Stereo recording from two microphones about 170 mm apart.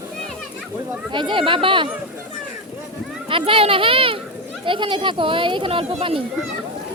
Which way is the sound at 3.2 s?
30° right (ahead or behind).